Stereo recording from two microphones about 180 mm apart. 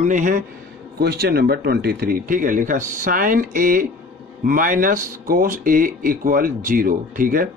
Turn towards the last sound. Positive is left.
turn(degrees=-50)  # may be behind; listen again after turning